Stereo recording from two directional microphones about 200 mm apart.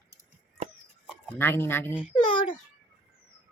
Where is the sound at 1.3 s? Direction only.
10° left (ahead or behind).